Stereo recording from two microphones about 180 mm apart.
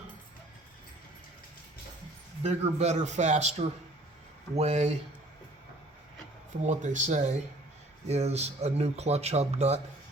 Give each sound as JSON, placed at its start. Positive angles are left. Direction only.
{"t": 2.4, "sound": "speech", "side_deg": -35}
{"t": 6.6, "sound": "speech", "side_deg": -45}